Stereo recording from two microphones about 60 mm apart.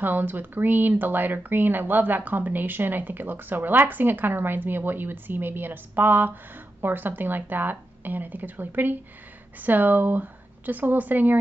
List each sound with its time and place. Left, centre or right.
0.0 s speech: right